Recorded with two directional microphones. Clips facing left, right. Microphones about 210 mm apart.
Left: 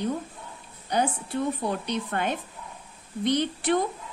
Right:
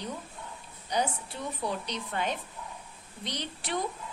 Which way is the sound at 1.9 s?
55° left (ahead or behind).